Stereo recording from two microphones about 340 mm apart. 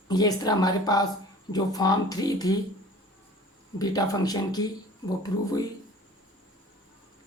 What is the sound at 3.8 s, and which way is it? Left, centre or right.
Speech, centre.